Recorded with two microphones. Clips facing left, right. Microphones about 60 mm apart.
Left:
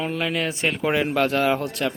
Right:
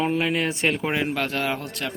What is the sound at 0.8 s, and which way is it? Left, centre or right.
Speech, centre.